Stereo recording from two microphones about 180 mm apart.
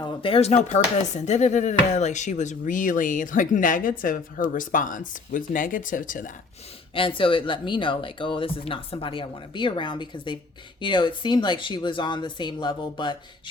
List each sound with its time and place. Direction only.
0.0 s speech: 30° left (ahead or behind); by 6.3 s 45° left (ahead or behind)
6.9 s speech: 30° left (ahead or behind)